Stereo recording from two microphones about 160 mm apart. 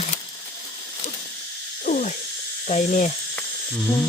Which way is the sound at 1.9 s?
50° left (ahead or behind).